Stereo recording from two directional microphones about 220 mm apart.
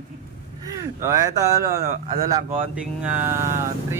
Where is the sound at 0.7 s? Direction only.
15° right (ahead or behind).